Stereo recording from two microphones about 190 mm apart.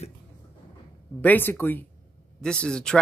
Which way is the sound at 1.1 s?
10° left (ahead or behind).